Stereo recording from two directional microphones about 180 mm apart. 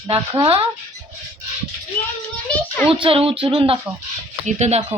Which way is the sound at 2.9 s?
30° right (ahead or behind).